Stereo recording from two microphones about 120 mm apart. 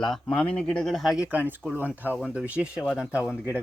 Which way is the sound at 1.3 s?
15° right (ahead or behind).